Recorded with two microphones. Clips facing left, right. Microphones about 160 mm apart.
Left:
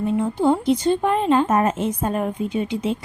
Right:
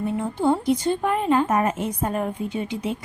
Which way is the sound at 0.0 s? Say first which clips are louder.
Left 3 dB; 20° left (ahead or behind).